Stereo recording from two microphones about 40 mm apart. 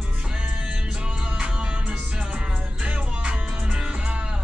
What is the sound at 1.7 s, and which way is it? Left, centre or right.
Music, right.